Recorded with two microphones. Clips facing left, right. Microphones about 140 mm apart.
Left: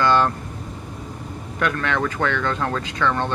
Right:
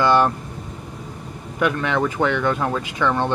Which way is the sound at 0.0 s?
15° right (ahead or behind).